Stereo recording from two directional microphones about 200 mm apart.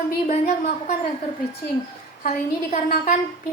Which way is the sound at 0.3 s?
35° left (ahead or behind).